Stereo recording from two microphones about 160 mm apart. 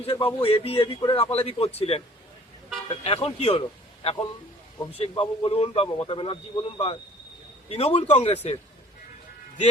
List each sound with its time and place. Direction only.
0.0 s a man's voice: 35° left (ahead or behind)